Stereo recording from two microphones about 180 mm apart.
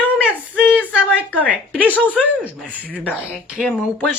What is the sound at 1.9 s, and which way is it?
Speech, 10° left (ahead or behind).